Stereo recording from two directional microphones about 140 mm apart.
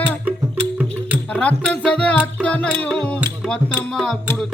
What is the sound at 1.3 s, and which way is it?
Music, 10° left (ahead or behind).